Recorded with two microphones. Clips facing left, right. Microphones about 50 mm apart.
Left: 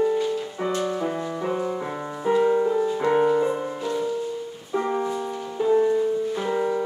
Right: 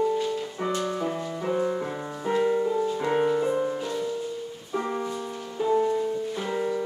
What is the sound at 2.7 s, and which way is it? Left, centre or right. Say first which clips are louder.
Music: left 3 dB; left.